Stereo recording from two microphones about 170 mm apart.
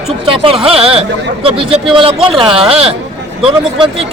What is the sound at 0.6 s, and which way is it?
A man's voice, 35° right (ahead or behind).